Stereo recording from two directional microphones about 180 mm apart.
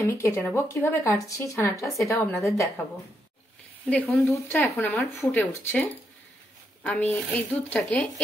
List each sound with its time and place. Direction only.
0.0 s speech: 15° left (ahead or behind)
3.8 s speech: 10° left (ahead or behind)
6.8 s speech: 10° left (ahead or behind)